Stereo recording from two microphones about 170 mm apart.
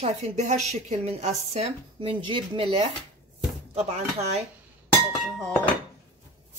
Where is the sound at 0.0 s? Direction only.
40° right (ahead or behind).